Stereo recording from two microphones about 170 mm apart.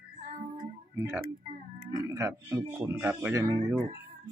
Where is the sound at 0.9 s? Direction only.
15° right (ahead or behind).